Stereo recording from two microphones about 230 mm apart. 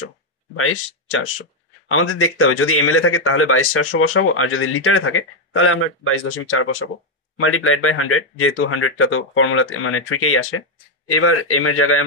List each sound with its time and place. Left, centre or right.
0.6 s speech: left